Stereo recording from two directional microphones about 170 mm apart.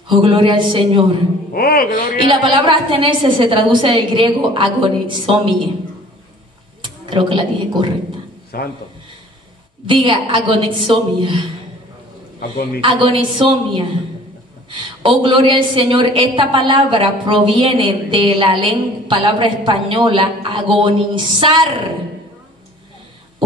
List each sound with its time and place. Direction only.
0.1 s a woman's voice: 30° right (ahead or behind)
1.5 s speech: 60° left (ahead or behind)
2.1 s a woman's voice: 30° right (ahead or behind)
6.8 s a woman's voice: 30° right (ahead or behind)
8.5 s speech: 65° left (ahead or behind)
9.8 s a woman's voice: 30° right (ahead or behind)
12.4 s speech: 65° left (ahead or behind)
12.8 s a woman's voice: 30° right (ahead or behind)